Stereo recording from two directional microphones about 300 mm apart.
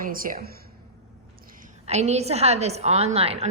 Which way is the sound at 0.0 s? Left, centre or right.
Right.